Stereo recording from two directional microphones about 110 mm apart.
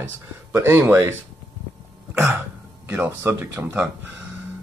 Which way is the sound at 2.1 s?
20° right (ahead or behind).